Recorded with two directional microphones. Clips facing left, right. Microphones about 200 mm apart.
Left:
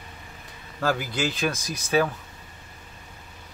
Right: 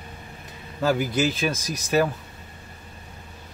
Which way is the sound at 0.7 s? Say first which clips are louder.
Right 4 dB; 15° right (ahead or behind).